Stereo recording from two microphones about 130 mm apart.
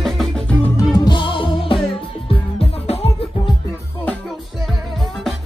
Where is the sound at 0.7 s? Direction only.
30° left (ahead or behind); by 3.1 s 50° left (ahead or behind).